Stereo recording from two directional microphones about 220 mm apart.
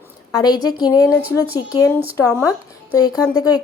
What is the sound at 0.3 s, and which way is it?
A woman's voice, 15° left (ahead or behind).